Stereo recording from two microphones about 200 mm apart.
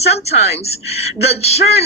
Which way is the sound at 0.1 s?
30° left (ahead or behind).